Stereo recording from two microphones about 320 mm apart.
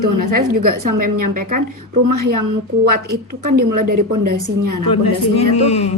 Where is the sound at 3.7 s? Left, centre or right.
Right.